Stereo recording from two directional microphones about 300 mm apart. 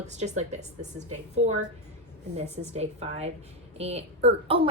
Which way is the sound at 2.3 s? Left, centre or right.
Right.